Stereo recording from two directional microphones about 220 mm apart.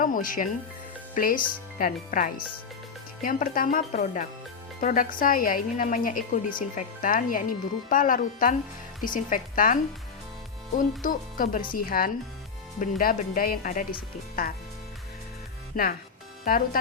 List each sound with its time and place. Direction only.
0.0 s a woman's voice: 40° left (ahead or behind)
10.8 s a woman's voice: 40° left (ahead or behind)
15.7 s speech: 40° left (ahead or behind)